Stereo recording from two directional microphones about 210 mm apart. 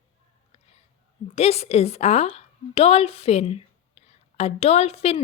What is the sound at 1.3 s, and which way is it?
A woman's voice, 30° left (ahead or behind).